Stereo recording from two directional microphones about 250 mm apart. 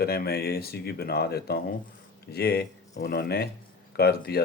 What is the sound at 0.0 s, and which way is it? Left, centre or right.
Speech, left.